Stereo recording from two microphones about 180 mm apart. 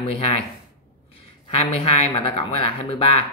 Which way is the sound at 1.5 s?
35° left (ahead or behind).